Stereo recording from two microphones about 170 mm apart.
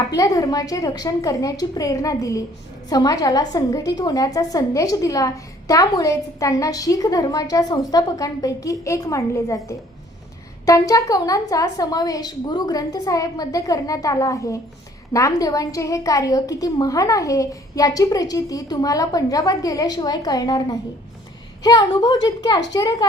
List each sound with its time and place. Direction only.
0.2 s a woman's voice: 20° left (ahead or behind)
10.7 s a woman's voice: 20° left (ahead or behind)